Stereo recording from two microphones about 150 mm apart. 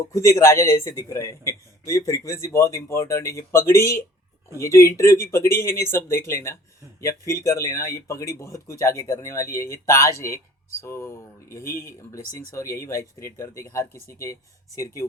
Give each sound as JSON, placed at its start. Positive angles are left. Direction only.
{"t": 0.1, "sound": "speech", "side_deg": 20}